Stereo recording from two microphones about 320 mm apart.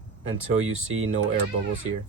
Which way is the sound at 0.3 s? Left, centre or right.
Right.